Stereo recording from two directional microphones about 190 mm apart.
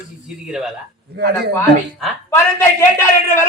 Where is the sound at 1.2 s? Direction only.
60° right (ahead or behind).